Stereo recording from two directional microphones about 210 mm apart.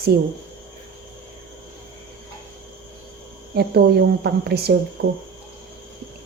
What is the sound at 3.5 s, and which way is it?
A woman's voice, 50° right (ahead or behind).